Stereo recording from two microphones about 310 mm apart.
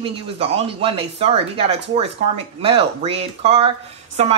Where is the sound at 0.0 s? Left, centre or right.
Centre.